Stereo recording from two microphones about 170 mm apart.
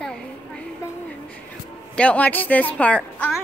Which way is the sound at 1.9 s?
10° left (ahead or behind).